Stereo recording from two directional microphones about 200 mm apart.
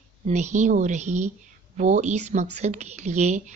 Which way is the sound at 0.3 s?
35° right (ahead or behind).